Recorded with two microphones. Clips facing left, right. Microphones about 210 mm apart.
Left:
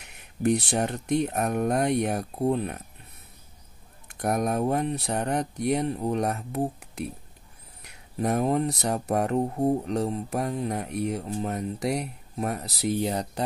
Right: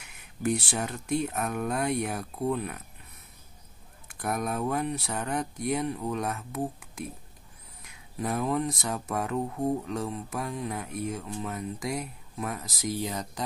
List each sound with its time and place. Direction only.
0.6 s speech: 35° left (ahead or behind)
4.1 s speech: 40° left (ahead or behind)
10.9 s speech: 70° left (ahead or behind)
11.1 s speech: 40° left (ahead or behind)